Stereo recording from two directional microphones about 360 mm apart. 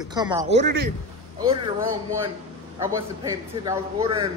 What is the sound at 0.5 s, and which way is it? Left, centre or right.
Speech, right.